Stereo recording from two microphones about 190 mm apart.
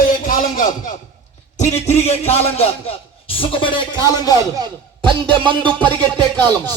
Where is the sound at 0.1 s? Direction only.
45° left (ahead or behind).